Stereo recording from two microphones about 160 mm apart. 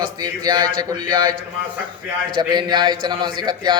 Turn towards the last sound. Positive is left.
turn(degrees=-25)  # may be behind; listen again after turning